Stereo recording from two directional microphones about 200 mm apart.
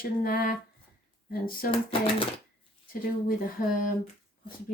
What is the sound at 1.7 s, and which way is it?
Speech, 25° left (ahead or behind).